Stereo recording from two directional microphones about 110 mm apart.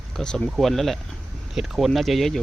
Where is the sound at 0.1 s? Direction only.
5° left (ahead or behind).